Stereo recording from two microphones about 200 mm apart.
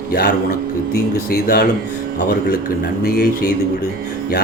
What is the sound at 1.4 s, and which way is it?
Speech, 50° left (ahead or behind).